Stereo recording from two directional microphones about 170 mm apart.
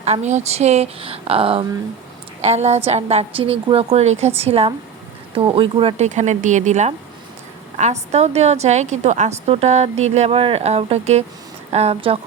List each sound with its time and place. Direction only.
0.0 s a woman's voice: 40° right (ahead or behind)